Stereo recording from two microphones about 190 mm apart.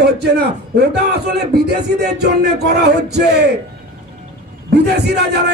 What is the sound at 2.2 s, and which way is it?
A man's voice, 60° right (ahead or behind).